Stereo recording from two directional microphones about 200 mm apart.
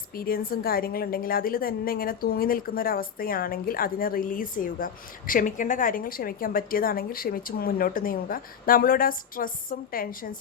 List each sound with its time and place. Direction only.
0.2 s a woman's voice: 45° left (ahead or behind)